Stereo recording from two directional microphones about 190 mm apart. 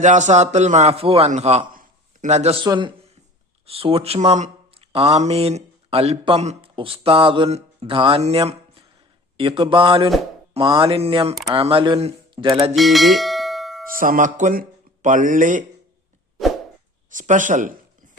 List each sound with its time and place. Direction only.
0.0 s a man's voice: 40° right (ahead or behind)
1.7 s a sound: 45° right (ahead or behind)
2.6 s speech: 25° right (ahead or behind)
12.7 s bell: centre (ahead or behind)
13.8 s speech: 45° right (ahead or behind)
17.1 s speech: 45° right (ahead or behind)